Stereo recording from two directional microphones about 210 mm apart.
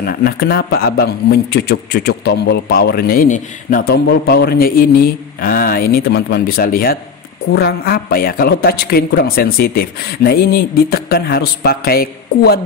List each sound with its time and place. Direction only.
0.0 s speech: 50° left (ahead or behind)